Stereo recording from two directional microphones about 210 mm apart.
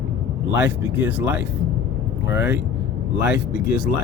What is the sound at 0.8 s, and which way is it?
Speech, 10° right (ahead or behind).